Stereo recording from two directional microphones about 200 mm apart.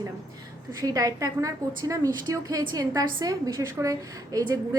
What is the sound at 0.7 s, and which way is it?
A woman's voice, 15° right (ahead or behind).